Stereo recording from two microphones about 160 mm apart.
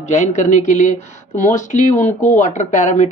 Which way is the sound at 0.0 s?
50° left (ahead or behind).